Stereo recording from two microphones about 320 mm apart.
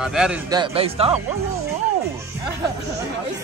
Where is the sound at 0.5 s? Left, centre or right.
Centre.